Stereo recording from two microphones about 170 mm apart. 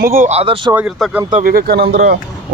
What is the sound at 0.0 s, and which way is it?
Speech, 55° right (ahead or behind).